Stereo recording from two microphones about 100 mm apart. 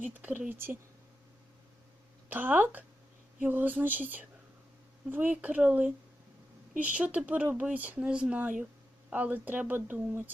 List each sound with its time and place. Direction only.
0.0 s speech: 15° right (ahead or behind)
2.3 s a woman's voice: 20° right (ahead or behind)